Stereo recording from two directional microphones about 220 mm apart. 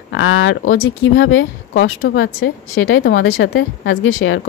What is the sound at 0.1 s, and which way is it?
A woman's voice, 60° left (ahead or behind).